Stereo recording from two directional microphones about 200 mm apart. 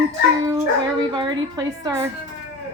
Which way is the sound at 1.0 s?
20° right (ahead or behind).